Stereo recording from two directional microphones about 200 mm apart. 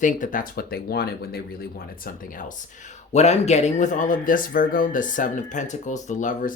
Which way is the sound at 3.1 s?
35° left (ahead or behind).